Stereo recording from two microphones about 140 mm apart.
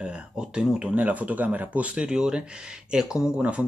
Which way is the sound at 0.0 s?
5° right (ahead or behind).